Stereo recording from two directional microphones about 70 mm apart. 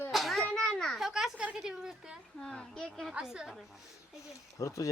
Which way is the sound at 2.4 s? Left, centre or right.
Centre.